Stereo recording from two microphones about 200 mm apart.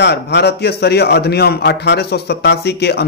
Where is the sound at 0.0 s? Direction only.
60° left (ahead or behind).